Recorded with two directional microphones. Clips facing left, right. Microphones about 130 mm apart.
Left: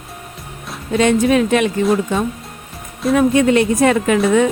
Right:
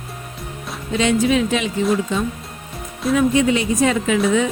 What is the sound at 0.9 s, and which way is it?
Speech, 55° left (ahead or behind).